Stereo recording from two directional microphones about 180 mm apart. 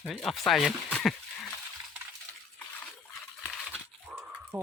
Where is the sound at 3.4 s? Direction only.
5° left (ahead or behind).